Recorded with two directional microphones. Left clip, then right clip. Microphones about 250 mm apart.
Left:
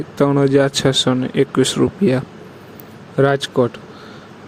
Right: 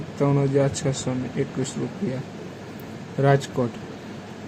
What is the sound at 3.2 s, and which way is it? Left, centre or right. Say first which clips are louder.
Speech: left 6 dB; left.